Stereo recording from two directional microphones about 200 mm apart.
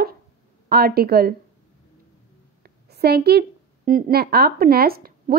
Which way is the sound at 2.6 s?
50° right (ahead or behind).